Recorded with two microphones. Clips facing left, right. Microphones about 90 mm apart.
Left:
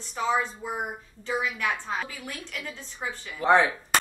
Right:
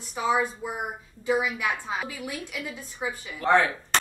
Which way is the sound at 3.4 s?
15° left (ahead or behind).